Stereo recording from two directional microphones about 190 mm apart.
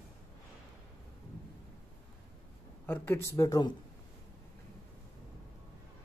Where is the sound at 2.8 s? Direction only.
10° left (ahead or behind).